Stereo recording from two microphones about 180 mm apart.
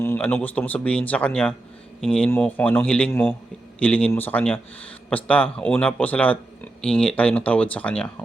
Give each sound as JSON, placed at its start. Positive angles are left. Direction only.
{"t": 0.0, "sound": "speech", "side_deg": 10}